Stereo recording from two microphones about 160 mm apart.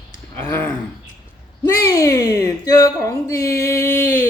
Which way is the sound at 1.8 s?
20° left (ahead or behind).